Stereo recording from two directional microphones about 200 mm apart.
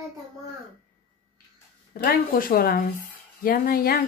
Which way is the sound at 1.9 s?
50° left (ahead or behind).